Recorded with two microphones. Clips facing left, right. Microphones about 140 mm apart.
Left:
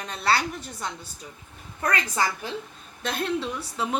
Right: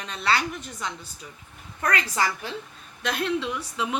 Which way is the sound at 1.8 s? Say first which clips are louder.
Even; 30° left (ahead or behind).